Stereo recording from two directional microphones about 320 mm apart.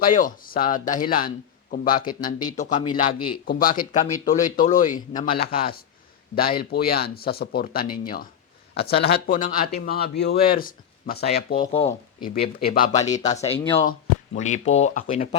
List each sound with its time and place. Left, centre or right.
0.0 s speech: left
2.4 s speech: centre
2.6 s speech: left
3.4 s speech: left